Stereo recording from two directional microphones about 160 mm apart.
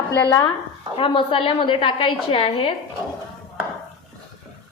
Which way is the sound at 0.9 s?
30° left (ahead or behind).